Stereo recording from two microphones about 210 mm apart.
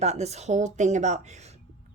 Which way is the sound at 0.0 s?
30° right (ahead or behind).